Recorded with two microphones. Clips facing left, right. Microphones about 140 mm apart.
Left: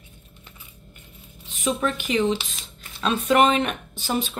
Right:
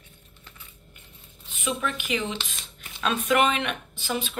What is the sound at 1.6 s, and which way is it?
Speech, 40° left (ahead or behind).